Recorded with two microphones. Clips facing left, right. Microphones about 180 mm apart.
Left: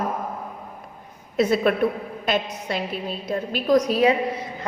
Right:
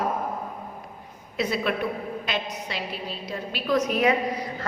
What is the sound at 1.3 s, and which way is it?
A woman's voice, 50° left (ahead or behind).